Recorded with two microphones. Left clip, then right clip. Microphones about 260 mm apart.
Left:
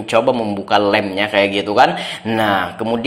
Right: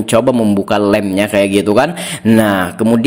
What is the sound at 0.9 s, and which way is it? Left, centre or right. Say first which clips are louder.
Speech: right 3 dB; right.